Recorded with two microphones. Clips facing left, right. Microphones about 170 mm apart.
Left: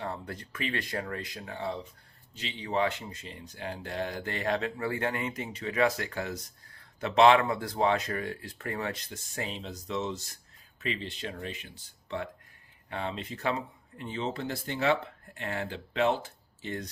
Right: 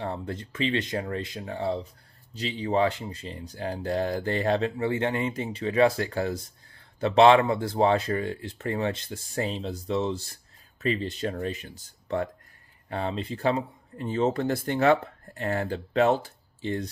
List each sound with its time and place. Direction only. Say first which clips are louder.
0.0 s speech: right 5 dB; 25° right (ahead or behind)
14.0 s speech: right 8 dB; 45° right (ahead or behind)